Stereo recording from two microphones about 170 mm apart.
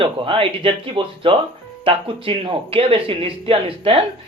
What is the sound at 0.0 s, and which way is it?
Speech, 30° right (ahead or behind).